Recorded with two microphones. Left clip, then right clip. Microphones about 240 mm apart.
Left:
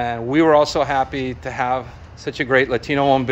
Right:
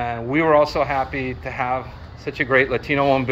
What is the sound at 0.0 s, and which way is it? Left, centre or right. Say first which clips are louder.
Speech: left 3 dB; left.